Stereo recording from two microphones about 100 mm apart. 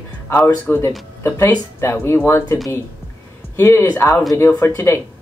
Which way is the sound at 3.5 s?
20° left (ahead or behind).